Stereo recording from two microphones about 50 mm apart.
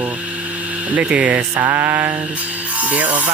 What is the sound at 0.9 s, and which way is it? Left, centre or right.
Speech, right.